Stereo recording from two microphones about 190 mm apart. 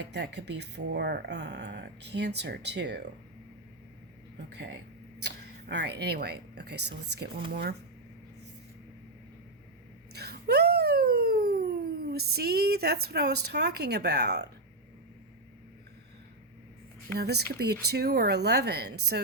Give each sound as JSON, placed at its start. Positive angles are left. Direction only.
{"t": 0.0, "sound": "speech", "side_deg": -65}
{"t": 5.2, "sound": "speech", "side_deg": -60}
{"t": 10.1, "sound": "a sound", "side_deg": -60}
{"t": 17.2, "sound": "speech", "side_deg": -60}